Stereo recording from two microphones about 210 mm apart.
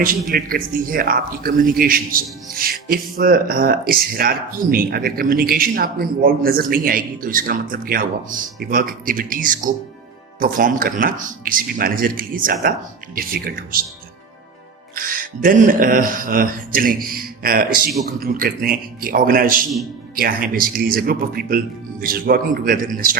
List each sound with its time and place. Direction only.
0.0 s speech: 45° right (ahead or behind)
8.6 s music: 45° right (ahead or behind)
10.4 s speech: 40° right (ahead or behind)
14.9 s music: 40° right (ahead or behind)
18.2 s speech: 45° right (ahead or behind)